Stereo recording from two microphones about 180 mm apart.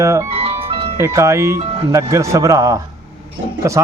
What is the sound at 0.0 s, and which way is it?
Speech, 15° right (ahead or behind).